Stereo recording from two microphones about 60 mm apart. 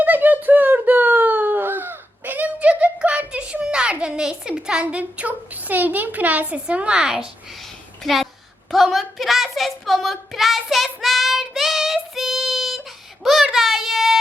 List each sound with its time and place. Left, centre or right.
0.0 s wail: right; by 7.3 s centre
8.0 s a woman's voice: centre
8.7 s child singing: centre
13.2 s a sound: centre